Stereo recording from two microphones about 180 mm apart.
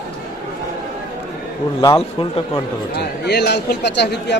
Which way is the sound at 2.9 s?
65° left (ahead or behind).